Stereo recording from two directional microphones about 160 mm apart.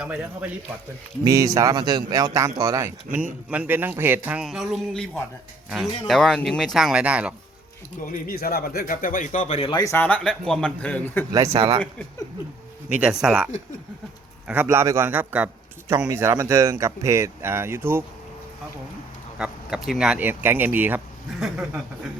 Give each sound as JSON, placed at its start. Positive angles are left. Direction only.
{"t": 0.0, "sound": "speech", "side_deg": -10}
{"t": 1.2, "sound": "speech", "side_deg": -20}
{"t": 8.0, "sound": "speech", "side_deg": 60}
{"t": 9.6, "sound": "speech", "side_deg": 30}
{"t": 9.8, "sound": "speech", "side_deg": 15}
{"t": 11.3, "sound": "speech", "side_deg": -20}
{"t": 11.5, "sound": "speech", "side_deg": -35}
{"t": 12.9, "sound": "speech", "side_deg": -5}
{"t": 19.4, "sound": "speech", "side_deg": -5}